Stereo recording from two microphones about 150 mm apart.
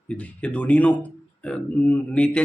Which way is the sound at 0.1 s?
10° left (ahead or behind).